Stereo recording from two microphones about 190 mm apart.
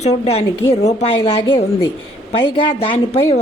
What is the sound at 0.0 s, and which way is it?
A woman's voice, 35° left (ahead or behind).